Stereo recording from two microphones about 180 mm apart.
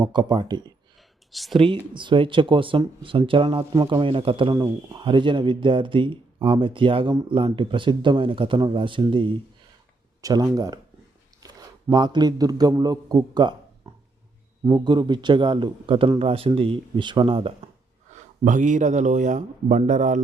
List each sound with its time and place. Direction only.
0.0 s speech: 25° right (ahead or behind)
1.3 s speech: centre (ahead or behind)
1.5 s speech: 30° right (ahead or behind)
3.6 s a man's voice: 20° right (ahead or behind)
14.7 s speech: 25° right (ahead or behind)
18.4 s speech: 45° right (ahead or behind)